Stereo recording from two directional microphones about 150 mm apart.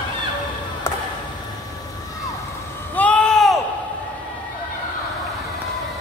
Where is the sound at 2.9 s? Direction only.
10° left (ahead or behind).